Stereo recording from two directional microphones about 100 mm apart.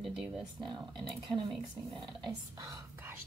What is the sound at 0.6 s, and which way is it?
Speech, 50° right (ahead or behind).